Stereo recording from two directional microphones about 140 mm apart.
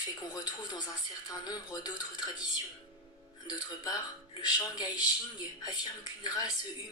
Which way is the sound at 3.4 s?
30° left (ahead or behind).